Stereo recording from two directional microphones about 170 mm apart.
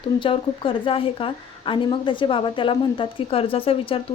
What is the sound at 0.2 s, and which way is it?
A woman's voice, 30° left (ahead or behind).